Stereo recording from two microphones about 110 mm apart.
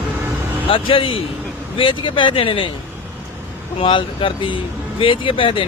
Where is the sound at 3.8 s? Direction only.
50° left (ahead or behind).